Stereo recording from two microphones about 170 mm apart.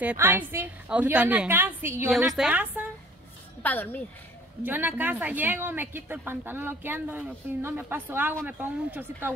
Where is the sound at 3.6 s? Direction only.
10° left (ahead or behind).